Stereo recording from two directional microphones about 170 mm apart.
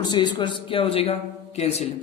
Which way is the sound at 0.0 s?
25° left (ahead or behind).